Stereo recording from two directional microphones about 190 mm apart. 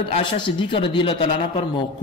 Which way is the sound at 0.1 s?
25° left (ahead or behind).